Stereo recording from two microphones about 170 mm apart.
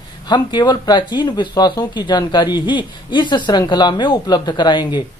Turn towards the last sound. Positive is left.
turn(degrees=25)  # may be behind; listen again after turning